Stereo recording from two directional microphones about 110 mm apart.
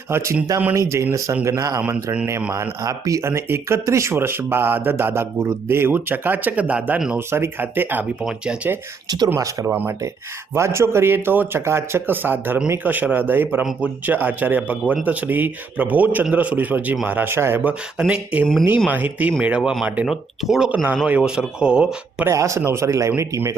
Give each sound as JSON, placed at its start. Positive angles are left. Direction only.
{"t": 0.1, "sound": "speech", "side_deg": -25}
{"t": 7.3, "sound": "a man's voice", "side_deg": -20}
{"t": 9.0, "sound": "speech", "side_deg": -35}
{"t": 9.6, "sound": "a man's voice", "side_deg": -20}
{"t": 22.3, "sound": "speech", "side_deg": -25}